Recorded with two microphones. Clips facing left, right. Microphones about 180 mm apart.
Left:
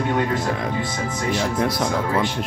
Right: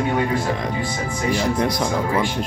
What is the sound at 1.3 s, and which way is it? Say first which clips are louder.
Speech: right 1 dB; 5° left (ahead or behind).